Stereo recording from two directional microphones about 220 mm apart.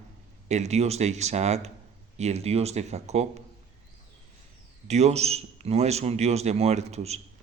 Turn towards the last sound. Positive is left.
turn(degrees=-30)  # may be behind; listen again after turning